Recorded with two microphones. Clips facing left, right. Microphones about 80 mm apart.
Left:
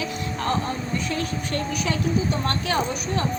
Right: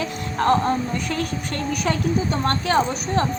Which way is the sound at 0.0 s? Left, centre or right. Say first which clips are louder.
Right 5 dB; right.